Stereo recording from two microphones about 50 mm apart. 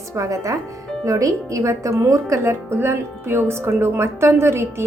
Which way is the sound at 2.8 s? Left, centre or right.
Right.